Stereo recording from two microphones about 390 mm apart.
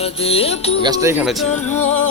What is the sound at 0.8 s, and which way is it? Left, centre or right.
Speech, centre.